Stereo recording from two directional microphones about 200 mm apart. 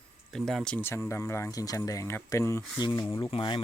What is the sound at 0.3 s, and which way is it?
Speech, centre (ahead or behind).